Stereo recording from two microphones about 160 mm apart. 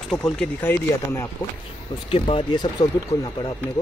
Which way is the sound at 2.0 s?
35° left (ahead or behind).